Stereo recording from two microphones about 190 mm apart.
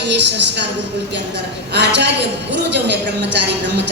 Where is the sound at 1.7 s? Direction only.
60° right (ahead or behind).